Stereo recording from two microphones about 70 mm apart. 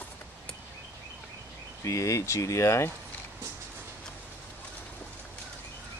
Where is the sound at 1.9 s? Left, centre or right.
Left.